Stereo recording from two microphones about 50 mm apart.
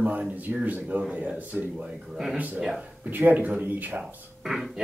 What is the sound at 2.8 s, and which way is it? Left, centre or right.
Speech, right.